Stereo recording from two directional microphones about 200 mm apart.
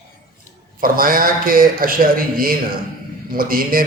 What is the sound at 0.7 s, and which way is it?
A man's voice, 45° right (ahead or behind).